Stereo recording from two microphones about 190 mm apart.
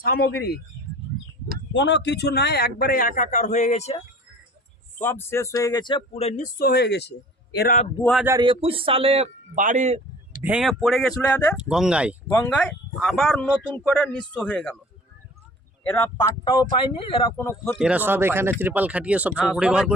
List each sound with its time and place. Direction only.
0.2 s speech: 60° left (ahead or behind)
1.7 s a man's voice: 65° left (ahead or behind); by 4.0 s 35° left (ahead or behind)
4.9 s speech: 10° left (ahead or behind); by 7.8 s 55° left (ahead or behind)
8.2 s speech: 15° right (ahead or behind)
8.4 s speech: 30° right (ahead or behind)
10.4 s speech: 5° right (ahead or behind)
11.5 s speech: 5° right (ahead or behind)
15.8 s speech: 10° left (ahead or behind)
16.1 s speech: 20° left (ahead or behind)
17.7 s speech: 5° right (ahead or behind)